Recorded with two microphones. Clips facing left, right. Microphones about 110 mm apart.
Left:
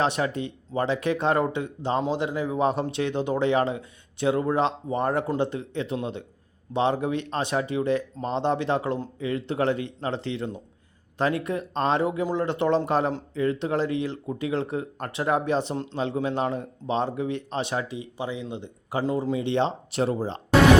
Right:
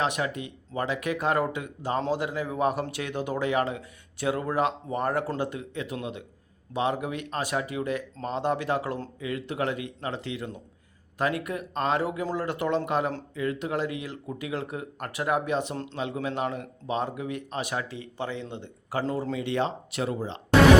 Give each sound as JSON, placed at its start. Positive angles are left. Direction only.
{"t": 0.0, "sound": "speech", "side_deg": 30}
{"t": 17.8, "sound": "speech", "side_deg": 15}